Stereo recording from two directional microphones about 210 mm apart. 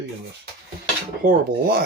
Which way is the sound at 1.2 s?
45° right (ahead or behind).